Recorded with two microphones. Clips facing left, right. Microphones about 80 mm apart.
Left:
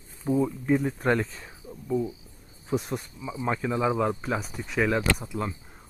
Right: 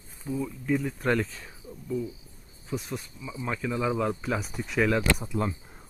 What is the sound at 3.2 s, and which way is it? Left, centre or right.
Speech, left.